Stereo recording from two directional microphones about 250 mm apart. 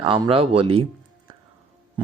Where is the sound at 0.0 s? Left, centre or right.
Right.